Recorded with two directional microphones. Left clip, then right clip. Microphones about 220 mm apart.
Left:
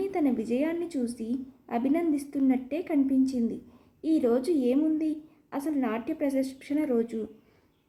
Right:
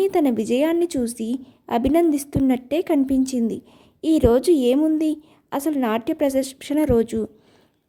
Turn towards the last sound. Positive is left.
turn(degrees=-45)  # may be behind; listen again after turning